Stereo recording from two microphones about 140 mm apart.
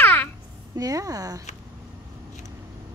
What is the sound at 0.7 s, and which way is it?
Speech, 25° right (ahead or behind).